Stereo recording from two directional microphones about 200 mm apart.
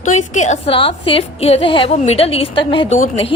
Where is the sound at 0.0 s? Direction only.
35° left (ahead or behind).